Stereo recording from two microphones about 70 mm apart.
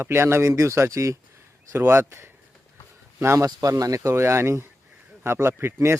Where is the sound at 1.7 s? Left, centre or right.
Right.